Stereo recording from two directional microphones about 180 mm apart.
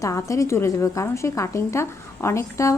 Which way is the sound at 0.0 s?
15° left (ahead or behind).